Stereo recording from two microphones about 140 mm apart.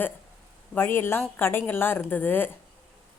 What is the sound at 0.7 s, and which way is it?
Speech, 15° left (ahead or behind).